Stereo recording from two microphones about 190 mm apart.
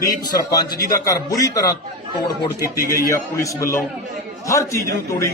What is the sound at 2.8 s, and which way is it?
A man's voice, 15° left (ahead or behind).